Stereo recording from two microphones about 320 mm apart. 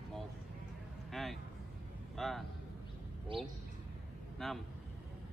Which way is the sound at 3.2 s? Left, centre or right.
Centre.